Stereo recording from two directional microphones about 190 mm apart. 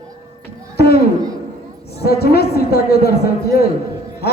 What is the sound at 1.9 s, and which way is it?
A man's voice, 55° left (ahead or behind).